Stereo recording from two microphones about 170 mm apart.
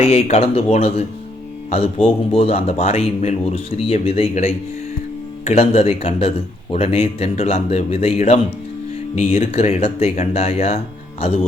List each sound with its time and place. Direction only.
0.0 s speech: 40° left (ahead or behind)